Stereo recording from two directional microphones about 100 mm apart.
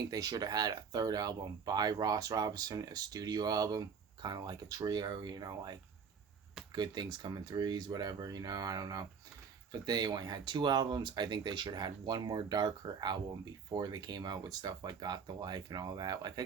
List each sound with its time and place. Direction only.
0.1 s speech: 40° right (ahead or behind)